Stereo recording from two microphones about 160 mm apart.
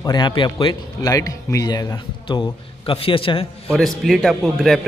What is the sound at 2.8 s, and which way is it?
Speech, 35° left (ahead or behind).